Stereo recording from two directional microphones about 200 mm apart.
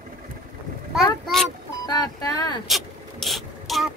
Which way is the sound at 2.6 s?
Centre (ahead or behind).